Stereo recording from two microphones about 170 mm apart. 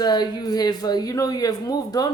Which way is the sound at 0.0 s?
25° left (ahead or behind).